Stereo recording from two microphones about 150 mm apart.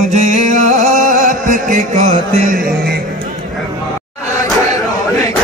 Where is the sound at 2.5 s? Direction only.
70° right (ahead or behind).